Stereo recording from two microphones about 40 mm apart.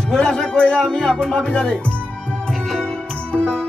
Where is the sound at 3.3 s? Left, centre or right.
Left.